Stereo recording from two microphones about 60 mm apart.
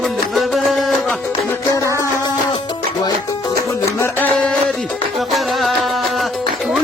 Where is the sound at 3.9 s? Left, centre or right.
Left.